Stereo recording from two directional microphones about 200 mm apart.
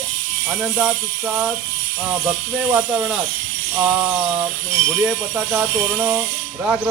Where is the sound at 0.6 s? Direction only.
5° right (ahead or behind).